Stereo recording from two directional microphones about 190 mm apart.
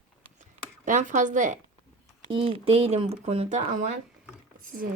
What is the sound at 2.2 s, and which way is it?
Speech, 30° right (ahead or behind).